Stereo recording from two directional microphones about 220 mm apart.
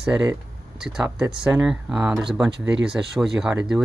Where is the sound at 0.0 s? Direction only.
5° right (ahead or behind).